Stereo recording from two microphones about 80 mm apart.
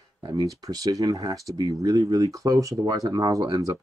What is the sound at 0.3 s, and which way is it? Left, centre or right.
Speech, right.